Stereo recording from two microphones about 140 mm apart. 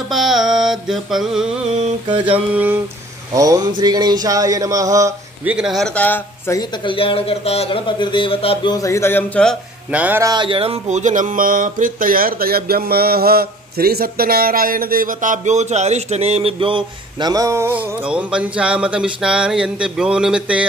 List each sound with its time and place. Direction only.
0.1 s mantra: centre (ahead or behind)
2.0 s speech: 35° right (ahead or behind)
2.5 s speech: 10° right (ahead or behind)
3.3 s a sound: 25° right (ahead or behind)
5.4 s a man's voice: 5° right (ahead or behind)
5.9 s speech: 15° left (ahead or behind)
6.8 s speech: 35° left (ahead or behind)
8.7 s speech: 20° left (ahead or behind)
9.8 s speech: 10° right (ahead or behind)
10.2 s speech: 35° right (ahead or behind)
10.9 s speech: 60° right (ahead or behind); by 20.6 s 5° right (ahead or behind)